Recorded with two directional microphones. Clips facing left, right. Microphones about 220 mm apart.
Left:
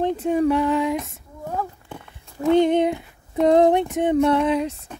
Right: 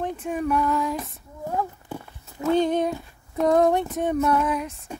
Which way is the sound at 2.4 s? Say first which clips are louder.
Left 4 dB; 20° left (ahead or behind).